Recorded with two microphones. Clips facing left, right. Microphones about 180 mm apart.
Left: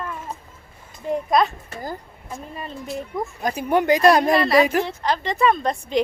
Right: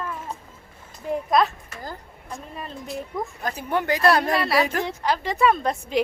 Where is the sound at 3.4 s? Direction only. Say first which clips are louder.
Left 7 dB; 15° left (ahead or behind).